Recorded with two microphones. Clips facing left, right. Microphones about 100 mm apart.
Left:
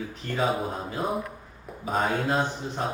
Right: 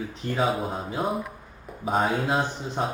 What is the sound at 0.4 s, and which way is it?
Speech, centre (ahead or behind).